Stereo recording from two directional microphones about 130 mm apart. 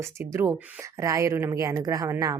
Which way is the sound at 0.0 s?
20° right (ahead or behind).